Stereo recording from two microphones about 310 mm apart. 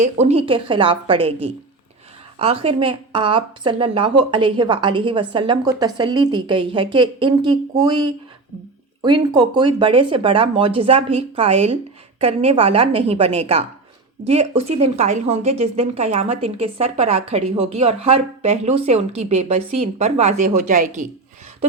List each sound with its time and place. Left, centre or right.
0.0 s a woman's voice: centre
2.4 s a woman's voice: centre